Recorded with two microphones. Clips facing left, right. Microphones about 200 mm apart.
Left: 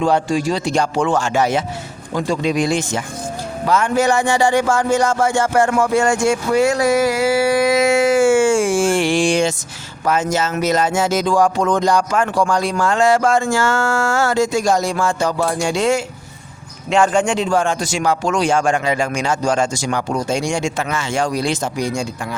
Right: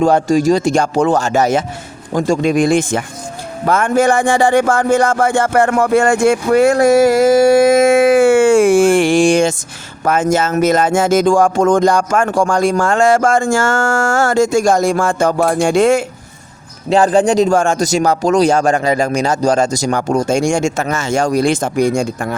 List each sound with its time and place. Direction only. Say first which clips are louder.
0.0 s speech: right 5 dB; 45° right (ahead or behind)
3.7 s music: right 3 dB; 55° right (ahead or behind)
10.0 s speech: right 4 dB; 50° right (ahead or behind)
16.9 s speech: right 4 dB; 35° right (ahead or behind); by 22.4 s 55° right (ahead or behind)